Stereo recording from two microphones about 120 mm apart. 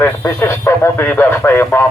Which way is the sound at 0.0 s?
20° left (ahead or behind).